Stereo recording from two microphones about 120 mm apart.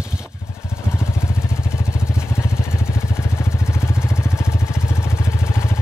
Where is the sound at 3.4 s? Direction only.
20° left (ahead or behind).